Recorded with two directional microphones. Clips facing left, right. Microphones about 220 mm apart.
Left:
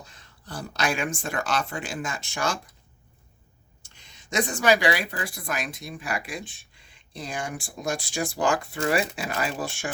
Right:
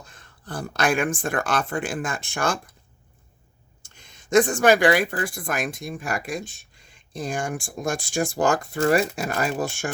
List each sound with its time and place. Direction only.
0.0 s speech: 50° right (ahead or behind)
3.8 s speech: 50° right (ahead or behind)